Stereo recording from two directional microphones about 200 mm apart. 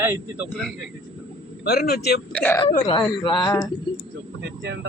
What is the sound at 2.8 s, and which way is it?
Speech, 25° left (ahead or behind).